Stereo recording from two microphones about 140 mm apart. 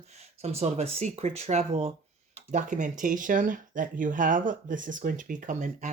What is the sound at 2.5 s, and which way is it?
Speech, 65° right (ahead or behind).